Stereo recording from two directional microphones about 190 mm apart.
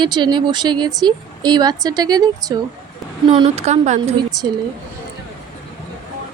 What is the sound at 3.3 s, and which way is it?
Speech, 30° right (ahead or behind).